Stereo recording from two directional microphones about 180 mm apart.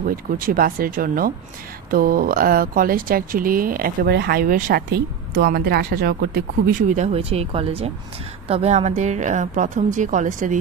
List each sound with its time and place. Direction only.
0.0 s speech: 50° right (ahead or behind)
7.0 s speech: 35° right (ahead or behind)